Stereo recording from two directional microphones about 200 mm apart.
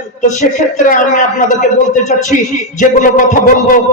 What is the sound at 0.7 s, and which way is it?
Speech, 40° left (ahead or behind).